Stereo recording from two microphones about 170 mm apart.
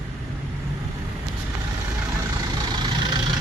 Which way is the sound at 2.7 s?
25° right (ahead or behind).